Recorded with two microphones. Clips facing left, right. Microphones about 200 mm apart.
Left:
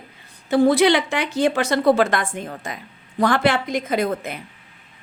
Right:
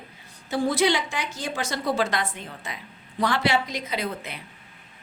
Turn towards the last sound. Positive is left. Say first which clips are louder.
# left 8 dB
turn(degrees=50)  # may be behind; listen again after turning